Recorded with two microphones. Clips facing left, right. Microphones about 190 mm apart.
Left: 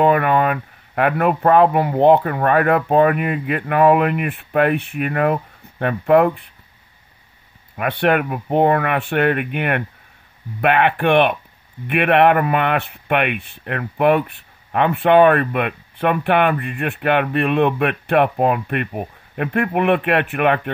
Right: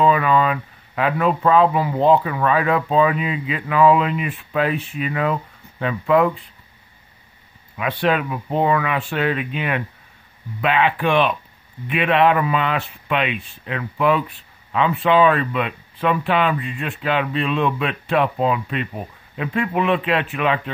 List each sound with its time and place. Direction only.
0.0 s speech: 60° left (ahead or behind)
7.7 s speech: 60° left (ahead or behind)